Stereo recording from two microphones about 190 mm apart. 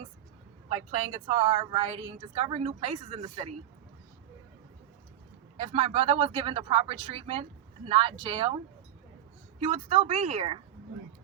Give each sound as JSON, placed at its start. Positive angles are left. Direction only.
{"t": 0.9, "sound": "a woman's voice", "side_deg": -35}
{"t": 5.5, "sound": "a woman's voice", "side_deg": -35}
{"t": 9.6, "sound": "a woman's voice", "side_deg": -35}